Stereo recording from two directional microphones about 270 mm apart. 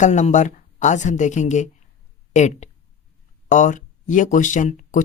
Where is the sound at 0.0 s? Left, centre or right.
Left.